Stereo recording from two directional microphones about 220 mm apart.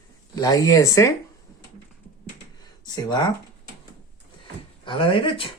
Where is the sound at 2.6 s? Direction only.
20° left (ahead or behind).